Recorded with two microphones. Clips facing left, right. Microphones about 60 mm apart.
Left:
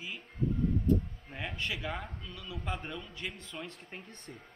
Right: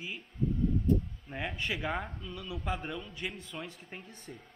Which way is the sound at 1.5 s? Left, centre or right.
Centre.